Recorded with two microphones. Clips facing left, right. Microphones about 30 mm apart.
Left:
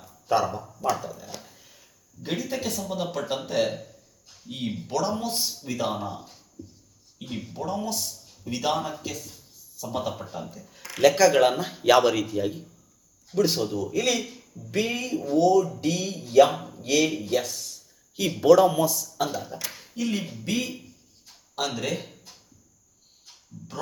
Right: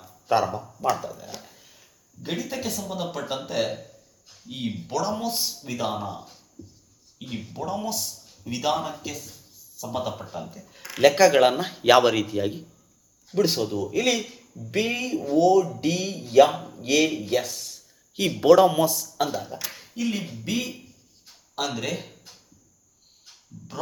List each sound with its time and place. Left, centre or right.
0.3 s speech: centre
11.0 s speech: right
13.3 s speech: right
16.6 s a sound: centre
16.8 s speech: right
18.3 s a man's voice: right
19.2 s a man's voice: centre